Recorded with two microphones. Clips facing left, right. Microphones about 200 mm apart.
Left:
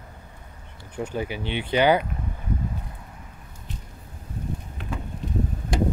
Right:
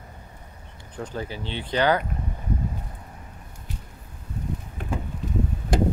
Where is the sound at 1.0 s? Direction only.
10° left (ahead or behind).